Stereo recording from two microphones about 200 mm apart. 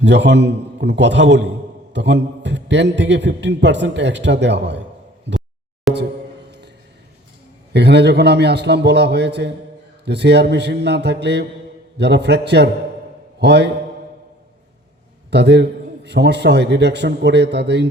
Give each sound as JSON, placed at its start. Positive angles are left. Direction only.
{"t": 0.0, "sound": "a man's voice", "side_deg": -60}
{"t": 5.9, "sound": "a sound", "side_deg": 0}
{"t": 7.7, "sound": "a man's voice", "side_deg": -55}
{"t": 15.3, "sound": "a man's voice", "side_deg": -55}